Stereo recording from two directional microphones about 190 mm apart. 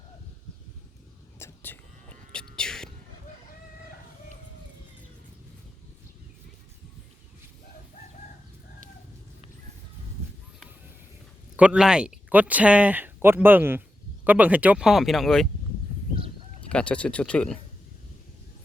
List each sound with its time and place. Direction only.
1.4 s whispering: 10° left (ahead or behind)
11.5 s speech: 5° right (ahead or behind)
16.1 s honk: 30° right (ahead or behind)
16.6 s speech: 5° left (ahead or behind)